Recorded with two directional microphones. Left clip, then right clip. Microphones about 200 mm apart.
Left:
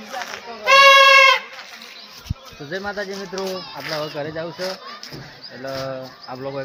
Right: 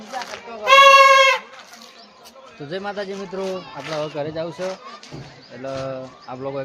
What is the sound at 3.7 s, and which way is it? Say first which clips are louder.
Speech: right 1 dB; 10° right (ahead or behind).